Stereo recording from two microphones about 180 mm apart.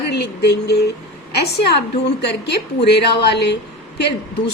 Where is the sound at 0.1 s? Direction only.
65° left (ahead or behind).